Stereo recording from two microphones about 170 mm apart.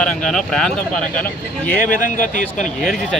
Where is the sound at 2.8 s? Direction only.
Centre (ahead or behind).